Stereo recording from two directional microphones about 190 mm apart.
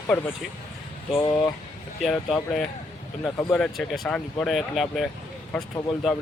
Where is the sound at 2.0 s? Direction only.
Centre (ahead or behind).